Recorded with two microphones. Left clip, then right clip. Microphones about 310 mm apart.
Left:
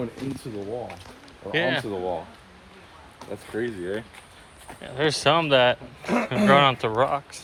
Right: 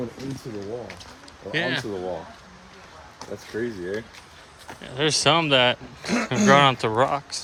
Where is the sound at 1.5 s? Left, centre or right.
Centre.